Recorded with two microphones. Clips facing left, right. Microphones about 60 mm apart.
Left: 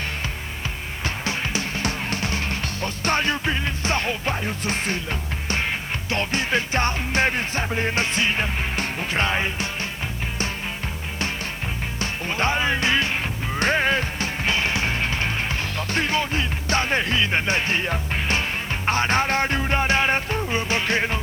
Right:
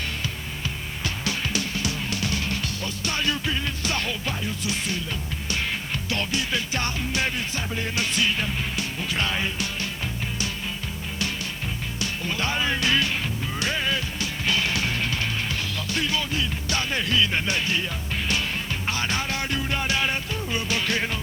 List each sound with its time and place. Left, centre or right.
1.0 s music: left
6.1 s music: left
11.9 s music: left
13.6 s music: left